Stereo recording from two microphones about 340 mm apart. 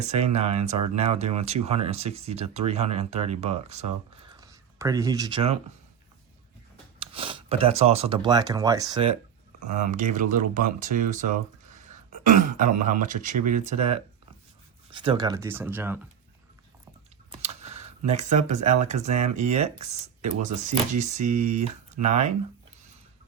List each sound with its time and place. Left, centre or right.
0.0 s speech: centre
7.0 s speech: centre
17.4 s a sound: centre
18.9 s speech: centre